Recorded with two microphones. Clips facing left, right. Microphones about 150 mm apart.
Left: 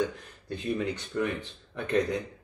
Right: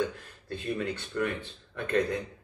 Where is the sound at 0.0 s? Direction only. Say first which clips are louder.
Left 1 dB; 15° left (ahead or behind).